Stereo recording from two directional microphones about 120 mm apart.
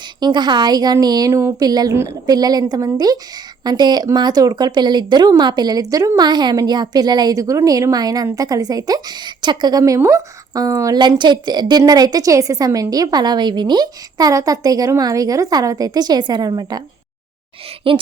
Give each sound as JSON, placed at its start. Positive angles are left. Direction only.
{"t": 0.2, "sound": "speech", "side_deg": -40}
{"t": 1.6, "sound": "speech", "side_deg": -35}
{"t": 17.9, "sound": "speech", "side_deg": -45}